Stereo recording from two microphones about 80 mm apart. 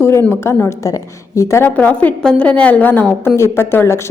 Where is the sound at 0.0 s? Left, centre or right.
Left.